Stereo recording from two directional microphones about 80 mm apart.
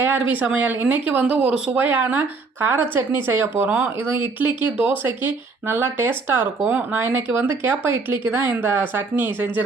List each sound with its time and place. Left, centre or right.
0.0 s speech: right
6.6 s speech: centre
6.9 s speech: right